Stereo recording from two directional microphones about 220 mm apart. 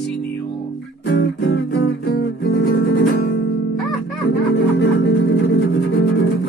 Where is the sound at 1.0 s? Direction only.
45° left (ahead or behind).